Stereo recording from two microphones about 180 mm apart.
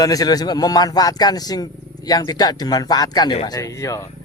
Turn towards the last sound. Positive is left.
turn(degrees=15)  # may be behind; listen again after turning